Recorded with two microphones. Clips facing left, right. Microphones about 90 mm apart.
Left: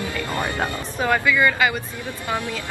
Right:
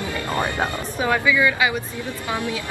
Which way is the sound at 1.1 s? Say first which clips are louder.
Even; 5° right (ahead or behind).